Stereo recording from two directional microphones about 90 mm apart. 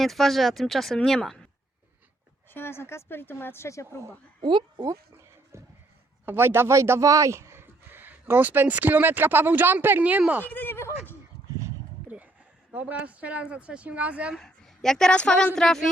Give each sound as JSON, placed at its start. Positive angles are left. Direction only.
{"t": 0.0, "sound": "speech", "side_deg": 0}
{"t": 2.5, "sound": "speech", "side_deg": 25}
{"t": 4.4, "sound": "speech", "side_deg": -65}
{"t": 4.9, "sound": "a sound", "side_deg": -30}
{"t": 6.2, "sound": "speech", "side_deg": -25}
{"t": 10.4, "sound": "a sound", "side_deg": 20}
{"t": 12.1, "sound": "a sound", "side_deg": -20}
{"t": 12.7, "sound": "speech", "side_deg": -15}
{"t": 14.3, "sound": "a woman's voice", "side_deg": 5}